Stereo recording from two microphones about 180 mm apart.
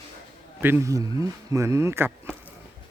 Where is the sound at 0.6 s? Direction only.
15° right (ahead or behind).